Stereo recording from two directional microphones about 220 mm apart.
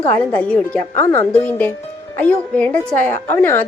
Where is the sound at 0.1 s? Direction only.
5° left (ahead or behind).